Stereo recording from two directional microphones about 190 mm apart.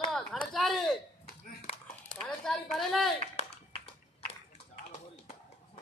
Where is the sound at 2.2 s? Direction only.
5° left (ahead or behind).